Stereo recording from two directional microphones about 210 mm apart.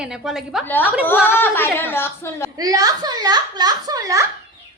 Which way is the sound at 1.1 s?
10° left (ahead or behind).